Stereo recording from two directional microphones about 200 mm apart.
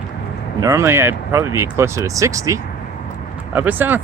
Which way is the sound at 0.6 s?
15° right (ahead or behind).